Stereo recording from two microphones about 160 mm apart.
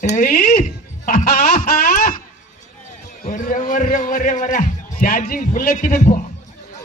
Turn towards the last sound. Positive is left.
turn(degrees=60)  # may be behind; listen again after turning